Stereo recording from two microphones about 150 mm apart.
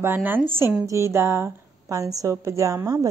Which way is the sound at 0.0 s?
15° right (ahead or behind).